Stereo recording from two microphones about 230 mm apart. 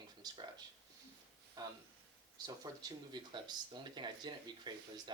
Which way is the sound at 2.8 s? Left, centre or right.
Centre.